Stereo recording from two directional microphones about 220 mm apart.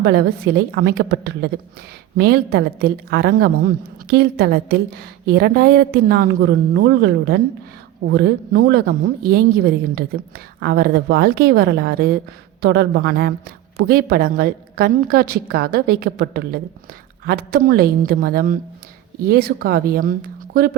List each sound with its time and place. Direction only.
0.0 s a woman's voice: 45° right (ahead or behind)